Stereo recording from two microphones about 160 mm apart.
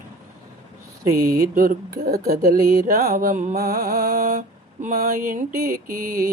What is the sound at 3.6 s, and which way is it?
Mantra, 65° right (ahead or behind).